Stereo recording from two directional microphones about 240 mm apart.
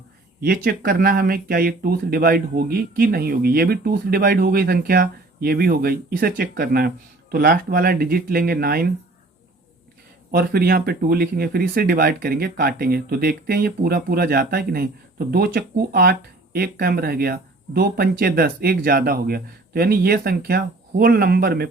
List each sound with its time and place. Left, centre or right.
0.4 s speech: right
10.3 s speech: right